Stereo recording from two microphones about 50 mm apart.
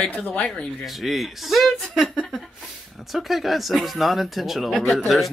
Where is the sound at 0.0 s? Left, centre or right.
Left.